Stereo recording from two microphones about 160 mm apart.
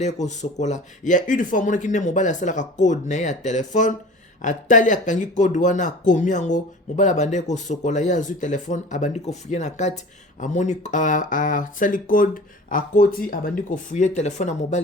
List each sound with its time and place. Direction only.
0.0 s speech: 45° left (ahead or behind)